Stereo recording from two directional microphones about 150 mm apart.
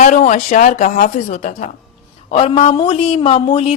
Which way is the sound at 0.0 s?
50° left (ahead or behind).